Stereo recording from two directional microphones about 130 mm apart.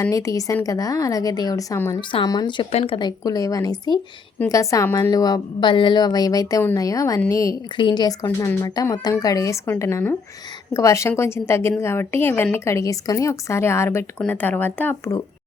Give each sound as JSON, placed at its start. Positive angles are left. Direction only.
{"t": 0.0, "sound": "speech", "side_deg": 25}
{"t": 2.0, "sound": "speech", "side_deg": 35}
{"t": 2.7, "sound": "speech", "side_deg": 45}
{"t": 7.8, "sound": "speech", "side_deg": 35}
{"t": 8.3, "sound": "speech", "side_deg": 15}
{"t": 8.6, "sound": "speech", "side_deg": 25}